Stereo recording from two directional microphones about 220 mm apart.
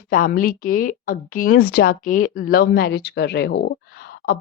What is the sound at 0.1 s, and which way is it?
A woman's voice, 40° left (ahead or behind).